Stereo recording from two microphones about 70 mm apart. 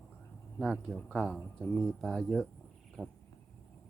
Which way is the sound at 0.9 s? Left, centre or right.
Centre.